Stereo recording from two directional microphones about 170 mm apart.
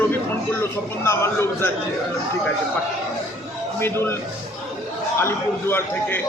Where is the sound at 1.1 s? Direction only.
15° left (ahead or behind).